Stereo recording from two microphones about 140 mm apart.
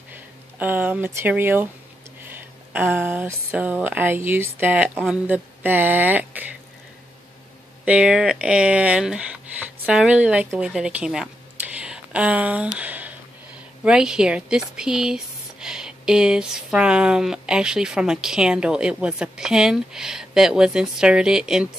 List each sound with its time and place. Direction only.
0.1 s speech: 15° right (ahead or behind)
7.8 s speech: 10° right (ahead or behind)
11.7 s a sound: 10° right (ahead or behind)
13.8 s speech: 5° right (ahead or behind)